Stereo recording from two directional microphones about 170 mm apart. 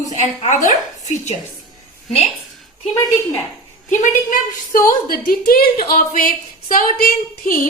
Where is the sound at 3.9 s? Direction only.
50° left (ahead or behind).